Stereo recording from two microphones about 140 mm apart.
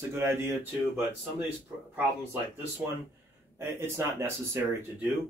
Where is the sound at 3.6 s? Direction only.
15° right (ahead or behind).